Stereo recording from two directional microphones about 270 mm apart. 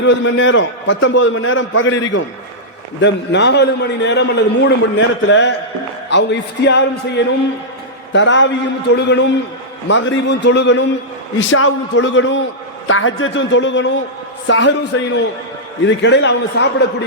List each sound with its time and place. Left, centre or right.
0.0 s a man's voice: left
8.1 s a man's voice: left